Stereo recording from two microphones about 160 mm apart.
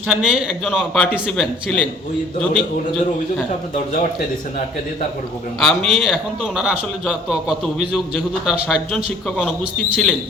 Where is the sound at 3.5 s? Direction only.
45° left (ahead or behind).